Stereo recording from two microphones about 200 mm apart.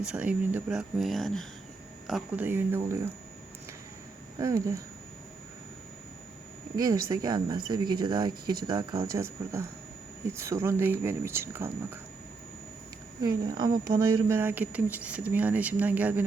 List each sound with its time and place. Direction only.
0.0 s speech: 5° right (ahead or behind)
4.4 s speech: 15° right (ahead or behind)
6.7 s speech: 20° right (ahead or behind)
13.2 s speech: 20° right (ahead or behind)